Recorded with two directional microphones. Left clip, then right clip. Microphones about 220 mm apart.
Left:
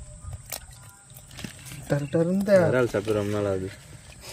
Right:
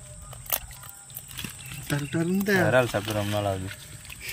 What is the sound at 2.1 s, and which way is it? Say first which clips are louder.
Speech: left 5 dB; 20° left (ahead or behind).